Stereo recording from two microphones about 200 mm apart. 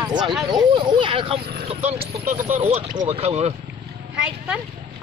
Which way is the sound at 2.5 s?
30° right (ahead or behind).